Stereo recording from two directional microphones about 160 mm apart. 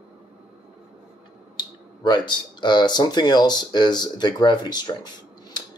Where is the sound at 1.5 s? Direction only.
30° left (ahead or behind).